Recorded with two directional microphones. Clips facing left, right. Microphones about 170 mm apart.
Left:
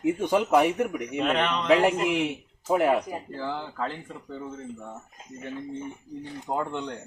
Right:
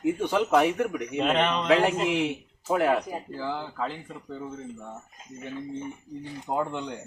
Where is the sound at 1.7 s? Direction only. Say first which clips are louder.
Left 2 dB; 5° left (ahead or behind).